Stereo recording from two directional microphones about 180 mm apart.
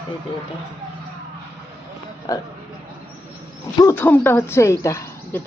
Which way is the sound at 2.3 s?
20° left (ahead or behind).